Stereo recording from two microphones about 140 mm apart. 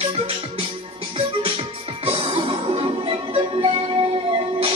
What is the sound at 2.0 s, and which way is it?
Music, 40° right (ahead or behind).